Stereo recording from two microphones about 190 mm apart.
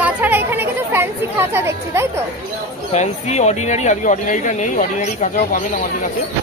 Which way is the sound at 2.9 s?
35° left (ahead or behind).